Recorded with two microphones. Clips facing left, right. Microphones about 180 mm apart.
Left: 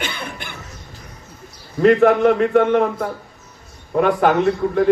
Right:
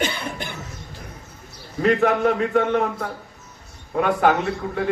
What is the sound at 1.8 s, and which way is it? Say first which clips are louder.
A man's voice: left 6 dB; 45° left (ahead or behind).